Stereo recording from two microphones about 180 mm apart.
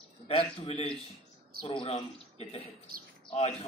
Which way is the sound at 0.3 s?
35° left (ahead or behind).